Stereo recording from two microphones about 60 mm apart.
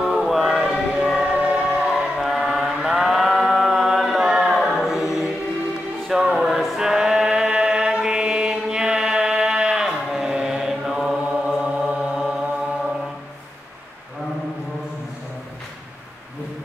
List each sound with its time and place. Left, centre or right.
0.0 s choir: centre
1.2 s music: centre
1.9 s choir: centre
4.6 s a capella: centre
6.0 s chant: centre
11.8 s mantra: centre